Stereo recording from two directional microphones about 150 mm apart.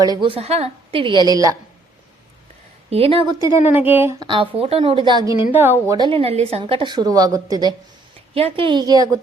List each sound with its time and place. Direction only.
0.0 s a woman's voice: 30° right (ahead or behind)
2.9 s a woman's voice: 40° right (ahead or behind)
3.3 s speech: 20° right (ahead or behind)
4.2 s a woman's voice: 35° right (ahead or behind)
5.5 s a woman's voice: 15° right (ahead or behind)
6.1 s a woman's voice: 40° right (ahead or behind)
8.3 s a woman's voice: 40° right (ahead or behind)